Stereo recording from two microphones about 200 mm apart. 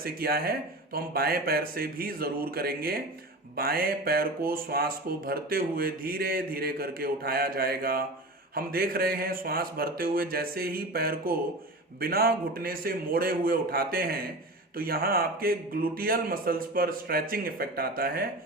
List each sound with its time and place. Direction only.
0.0 s speech: 50° right (ahead or behind)